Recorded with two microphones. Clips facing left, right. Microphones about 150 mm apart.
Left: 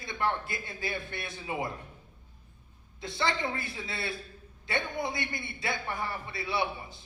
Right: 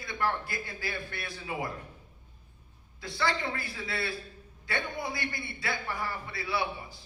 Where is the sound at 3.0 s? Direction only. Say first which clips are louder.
Even; 20° left (ahead or behind).